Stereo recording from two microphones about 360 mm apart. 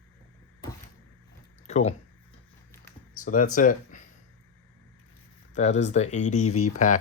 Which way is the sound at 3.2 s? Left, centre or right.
Left.